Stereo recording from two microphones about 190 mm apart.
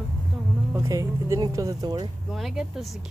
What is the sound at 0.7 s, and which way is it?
Speech, 15° right (ahead or behind).